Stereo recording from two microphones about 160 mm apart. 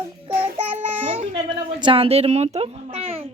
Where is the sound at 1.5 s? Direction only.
30° right (ahead or behind).